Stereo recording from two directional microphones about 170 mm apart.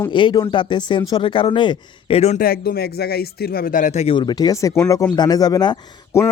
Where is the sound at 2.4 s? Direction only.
65° left (ahead or behind); by 4.2 s 40° left (ahead or behind).